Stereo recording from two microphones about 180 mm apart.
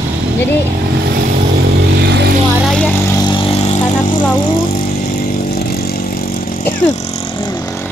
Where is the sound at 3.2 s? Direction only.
30° left (ahead or behind).